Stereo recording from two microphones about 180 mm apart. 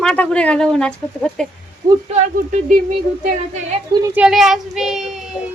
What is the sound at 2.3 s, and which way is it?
Speech, 45° right (ahead or behind).